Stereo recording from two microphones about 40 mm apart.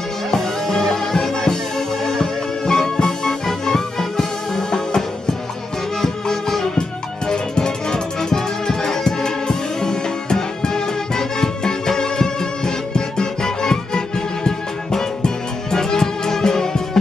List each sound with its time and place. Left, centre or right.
0.3 s music: centre